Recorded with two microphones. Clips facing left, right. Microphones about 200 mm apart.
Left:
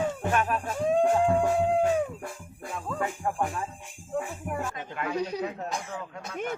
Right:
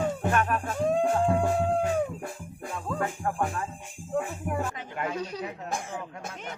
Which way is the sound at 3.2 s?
15° left (ahead or behind).